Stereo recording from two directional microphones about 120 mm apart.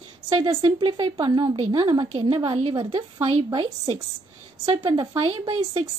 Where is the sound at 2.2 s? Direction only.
50° right (ahead or behind).